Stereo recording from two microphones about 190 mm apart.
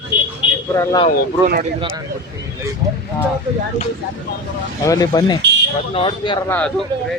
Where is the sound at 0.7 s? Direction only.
15° left (ahead or behind).